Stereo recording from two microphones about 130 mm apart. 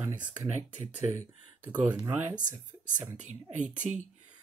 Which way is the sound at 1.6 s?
15° right (ahead or behind).